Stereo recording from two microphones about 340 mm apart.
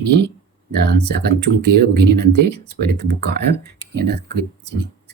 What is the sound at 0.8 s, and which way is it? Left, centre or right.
Speech, right.